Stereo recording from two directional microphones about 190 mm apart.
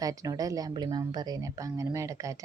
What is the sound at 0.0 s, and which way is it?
Speech, 20° right (ahead or behind).